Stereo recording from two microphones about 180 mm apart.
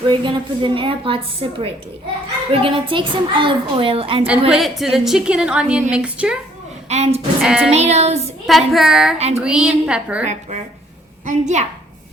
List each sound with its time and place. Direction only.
0.1 s a woman's voice: 25° right (ahead or behind)
4.3 s a woman's voice: centre (ahead or behind)
6.8 s a woman's voice: 35° right (ahead or behind)
7.4 s a woman's voice: 5° right (ahead or behind)
7.7 s child singing: 35° right (ahead or behind)
8.4 s a woman's voice: centre (ahead or behind)
9.1 s child singing: 35° right (ahead or behind)
9.4 s a woman's voice: 5° right (ahead or behind)
11.3 s child singing: 40° right (ahead or behind)